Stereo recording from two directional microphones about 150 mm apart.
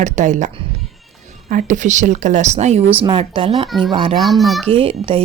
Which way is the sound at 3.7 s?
Centre (ahead or behind).